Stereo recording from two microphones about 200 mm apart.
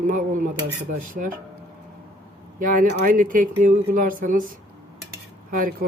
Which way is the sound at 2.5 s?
40° right (ahead or behind).